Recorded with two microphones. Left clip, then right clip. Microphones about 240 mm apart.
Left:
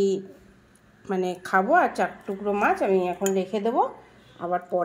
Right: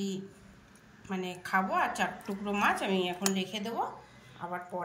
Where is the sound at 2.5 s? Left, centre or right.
Centre.